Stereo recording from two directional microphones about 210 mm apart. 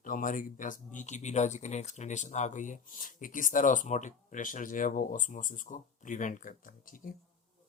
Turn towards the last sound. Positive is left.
turn(degrees=40)  # may be behind; listen again after turning